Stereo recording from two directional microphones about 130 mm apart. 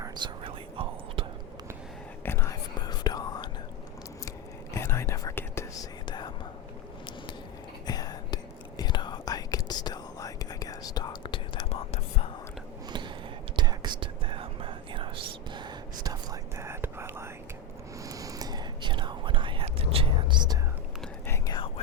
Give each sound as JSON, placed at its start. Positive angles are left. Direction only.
{"t": 0.4, "sound": "whispering", "side_deg": -45}
{"t": 2.2, "sound": "whispering", "side_deg": 20}
{"t": 2.8, "sound": "whispering", "side_deg": 30}
{"t": 4.3, "sound": "whispering", "side_deg": 20}
{"t": 6.1, "sound": "whispering", "side_deg": 35}
{"t": 7.9, "sound": "whispering", "side_deg": 30}
{"t": 13.6, "sound": "whispering", "side_deg": -35}
{"t": 21.2, "sound": "whispering", "side_deg": 20}